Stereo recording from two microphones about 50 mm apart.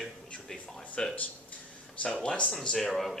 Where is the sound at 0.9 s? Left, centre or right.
Left.